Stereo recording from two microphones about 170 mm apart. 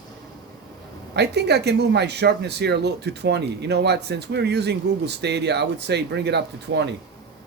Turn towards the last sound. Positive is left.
turn(degrees=-85)